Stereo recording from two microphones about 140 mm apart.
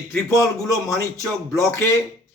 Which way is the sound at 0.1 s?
20° left (ahead or behind).